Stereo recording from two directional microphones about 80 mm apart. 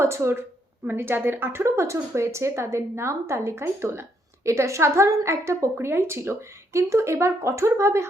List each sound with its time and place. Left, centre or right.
0.0 s speech: right